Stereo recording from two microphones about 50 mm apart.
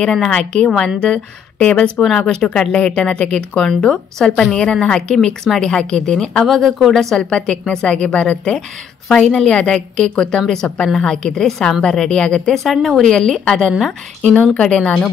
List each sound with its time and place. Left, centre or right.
0.3 s a woman's voice: centre
1.6 s speech: left
2.0 s a woman's voice: centre
6.4 s speech: centre
7.2 s a woman's voice: centre
12.5 s a woman's voice: centre
14.2 s a woman's voice: left